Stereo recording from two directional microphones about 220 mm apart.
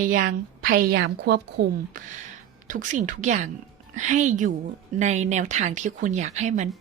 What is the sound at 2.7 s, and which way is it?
Speech, 35° right (ahead or behind).